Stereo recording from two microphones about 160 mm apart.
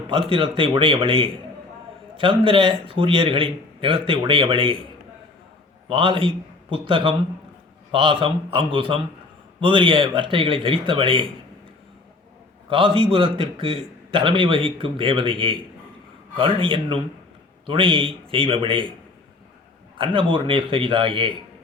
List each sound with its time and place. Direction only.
0.1 s a man's voice: 30° right (ahead or behind)
5.9 s a man's voice: 30° right (ahead or behind)
12.6 s a man's voice: 35° right (ahead or behind)
20.0 s a man's voice: 35° right (ahead or behind)